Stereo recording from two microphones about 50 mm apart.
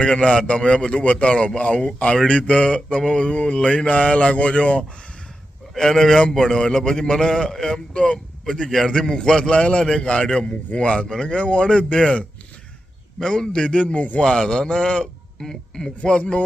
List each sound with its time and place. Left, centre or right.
0.0 s a man's voice: centre
5.7 s a man's voice: centre
13.1 s a man's voice: centre; by 14.3 s left
14.3 s a man's voice: centre